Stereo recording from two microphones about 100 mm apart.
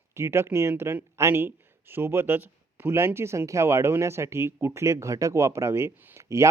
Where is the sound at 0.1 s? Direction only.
25° right (ahead or behind).